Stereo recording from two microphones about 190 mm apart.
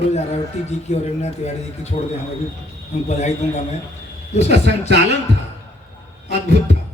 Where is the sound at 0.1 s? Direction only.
35° left (ahead or behind).